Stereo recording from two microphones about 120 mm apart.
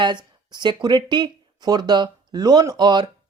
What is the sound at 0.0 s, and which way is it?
Speech, 35° right (ahead or behind).